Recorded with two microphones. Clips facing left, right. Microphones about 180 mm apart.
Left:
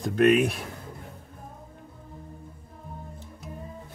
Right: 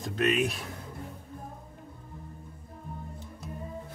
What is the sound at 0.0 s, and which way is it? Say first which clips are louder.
Speech: left 8 dB; 55° left (ahead or behind).